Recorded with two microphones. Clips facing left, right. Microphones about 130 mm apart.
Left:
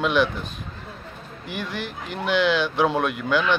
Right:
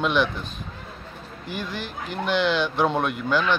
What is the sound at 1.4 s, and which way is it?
Speech, 55° left (ahead or behind).